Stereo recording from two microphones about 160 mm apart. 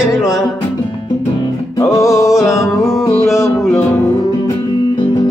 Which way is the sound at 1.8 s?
20° left (ahead or behind).